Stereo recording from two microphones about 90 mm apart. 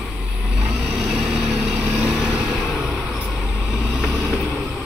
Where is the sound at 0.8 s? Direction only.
5° right (ahead or behind).